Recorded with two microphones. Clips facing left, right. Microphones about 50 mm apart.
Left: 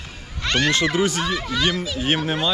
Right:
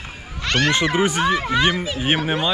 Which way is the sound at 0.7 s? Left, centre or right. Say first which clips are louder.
Right 1 dB; right.